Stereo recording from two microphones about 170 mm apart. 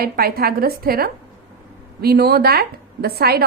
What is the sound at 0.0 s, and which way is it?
A woman's voice, 65° right (ahead or behind).